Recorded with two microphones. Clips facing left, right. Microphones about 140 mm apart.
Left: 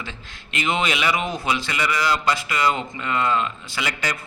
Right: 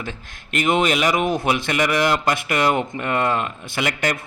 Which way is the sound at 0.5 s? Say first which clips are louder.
Right 5 dB; 50° right (ahead or behind).